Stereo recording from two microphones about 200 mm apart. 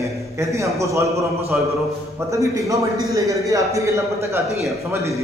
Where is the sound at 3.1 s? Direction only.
15° right (ahead or behind).